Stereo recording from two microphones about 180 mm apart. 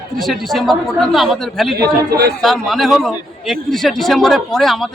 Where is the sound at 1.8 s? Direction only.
60° right (ahead or behind).